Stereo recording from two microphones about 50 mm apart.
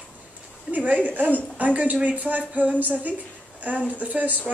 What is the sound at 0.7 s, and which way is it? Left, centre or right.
Speech, right.